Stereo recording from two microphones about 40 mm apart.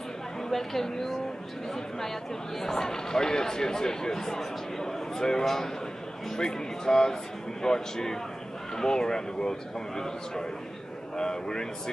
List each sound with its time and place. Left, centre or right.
0.5 s a woman's voice: centre